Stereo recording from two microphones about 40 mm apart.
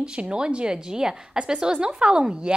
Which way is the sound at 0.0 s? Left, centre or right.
Right.